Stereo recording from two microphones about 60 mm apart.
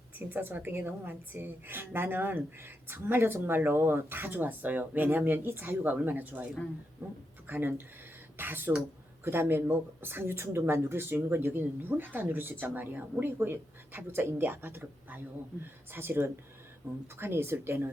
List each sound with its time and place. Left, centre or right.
0.2 s a woman's voice: right